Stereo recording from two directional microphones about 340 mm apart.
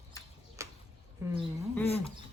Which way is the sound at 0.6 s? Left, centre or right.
Centre.